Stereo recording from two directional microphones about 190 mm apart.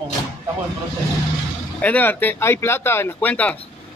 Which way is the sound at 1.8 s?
10° left (ahead or behind).